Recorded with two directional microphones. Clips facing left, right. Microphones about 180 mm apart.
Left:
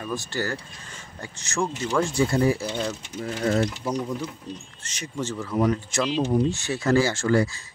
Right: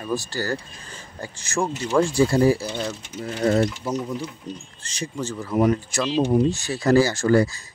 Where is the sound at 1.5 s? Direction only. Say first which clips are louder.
Right 3 dB; 30° right (ahead or behind).